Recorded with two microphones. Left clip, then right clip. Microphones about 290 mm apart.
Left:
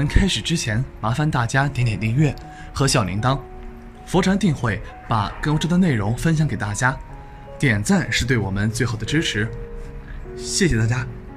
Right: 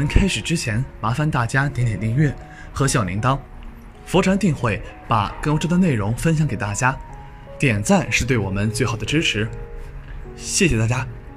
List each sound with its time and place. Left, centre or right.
0.0 s speech: centre